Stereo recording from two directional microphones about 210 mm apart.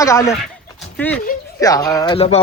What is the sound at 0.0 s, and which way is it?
Speech, 15° left (ahead or behind).